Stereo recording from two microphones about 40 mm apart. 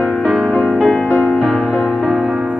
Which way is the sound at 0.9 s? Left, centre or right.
Left.